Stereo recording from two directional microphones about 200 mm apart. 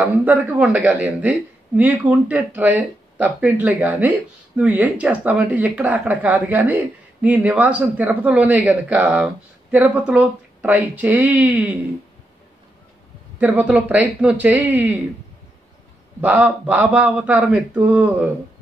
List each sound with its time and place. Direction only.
0.0 s speech: 10° right (ahead or behind)
13.4 s speech: 10° right (ahead or behind)
16.2 s speech: 10° right (ahead or behind)